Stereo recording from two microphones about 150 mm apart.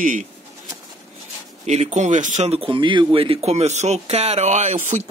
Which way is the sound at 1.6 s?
50° right (ahead or behind).